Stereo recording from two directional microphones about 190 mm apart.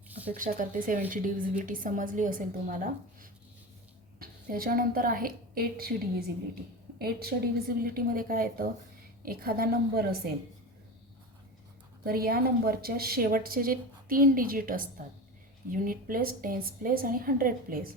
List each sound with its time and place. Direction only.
0.1 s a sound: 10° right (ahead or behind)
0.3 s a woman's voice: 45° right (ahead or behind)
12.0 s a woman's voice: 50° right (ahead or behind)